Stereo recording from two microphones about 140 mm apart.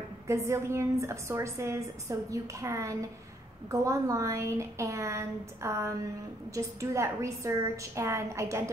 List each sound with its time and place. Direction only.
0.3 s a woman's voice: 20° right (ahead or behind)